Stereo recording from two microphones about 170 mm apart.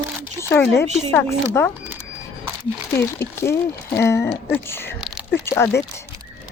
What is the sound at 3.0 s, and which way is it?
Speech, 15° left (ahead or behind).